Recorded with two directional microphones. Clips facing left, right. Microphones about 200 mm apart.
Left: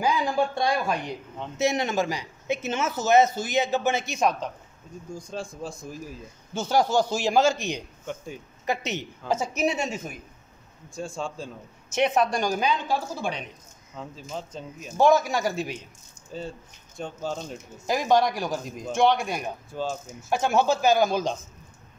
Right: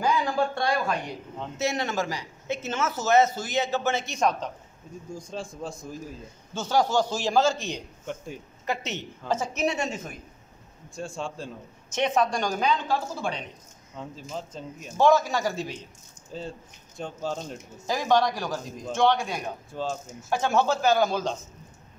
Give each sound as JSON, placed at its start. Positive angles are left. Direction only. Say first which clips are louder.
{"t": 0.0, "sound": "a sound", "louder": "left 1 dB", "side_deg": 15}
{"t": 1.6, "sound": "a man's voice", "louder": "left 3 dB", "side_deg": 15}
{"t": 5.6, "sound": "a man's voice", "louder": "even", "side_deg": 5}
{"t": 13.9, "sound": "speech", "louder": "even", "side_deg": 0}
{"t": 15.0, "sound": "a man's voice", "louder": "left 1 dB", "side_deg": 15}
{"t": 17.8, "sound": "a man's voice", "louder": "left 1 dB", "side_deg": 15}